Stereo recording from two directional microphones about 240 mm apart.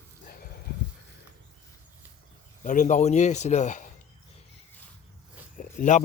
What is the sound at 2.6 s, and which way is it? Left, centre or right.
Speech, left.